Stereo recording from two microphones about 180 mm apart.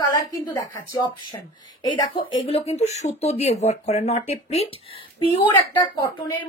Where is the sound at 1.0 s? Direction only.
25° left (ahead or behind).